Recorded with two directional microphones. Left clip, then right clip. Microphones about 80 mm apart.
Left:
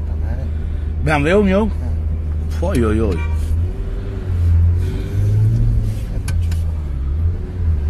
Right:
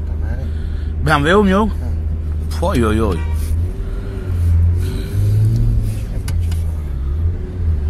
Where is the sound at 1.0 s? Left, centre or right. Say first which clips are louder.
Right 2 dB; right.